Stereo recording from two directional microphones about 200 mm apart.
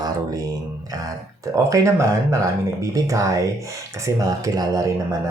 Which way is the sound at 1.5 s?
15° right (ahead or behind).